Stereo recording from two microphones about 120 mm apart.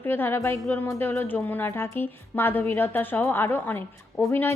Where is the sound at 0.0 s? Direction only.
15° left (ahead or behind).